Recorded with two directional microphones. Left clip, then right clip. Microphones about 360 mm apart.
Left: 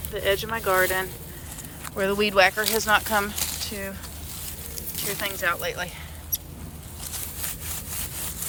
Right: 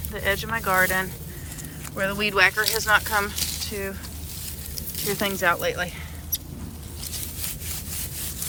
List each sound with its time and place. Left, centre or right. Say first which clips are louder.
0.1 s speech: left 1 dB; centre
5.2 s speech: right 4 dB; centre